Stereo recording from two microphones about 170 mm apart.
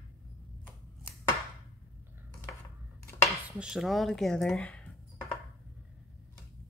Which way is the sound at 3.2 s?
Centre (ahead or behind).